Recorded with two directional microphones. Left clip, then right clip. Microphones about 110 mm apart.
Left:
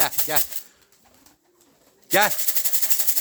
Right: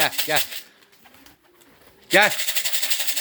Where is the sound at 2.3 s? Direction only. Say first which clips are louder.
Right 5 dB; 40° left (ahead or behind).